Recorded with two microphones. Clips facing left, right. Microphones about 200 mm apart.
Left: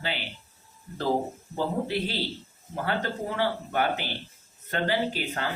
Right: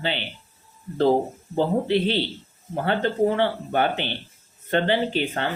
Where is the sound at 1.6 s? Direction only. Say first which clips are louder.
Right 7 dB; 25° right (ahead or behind).